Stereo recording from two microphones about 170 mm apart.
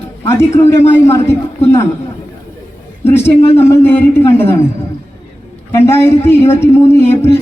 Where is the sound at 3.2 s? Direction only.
15° left (ahead or behind).